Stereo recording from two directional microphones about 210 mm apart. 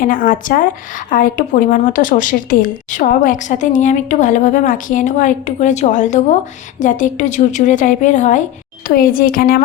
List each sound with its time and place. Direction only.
0.0 s a woman's voice: 40° left (ahead or behind)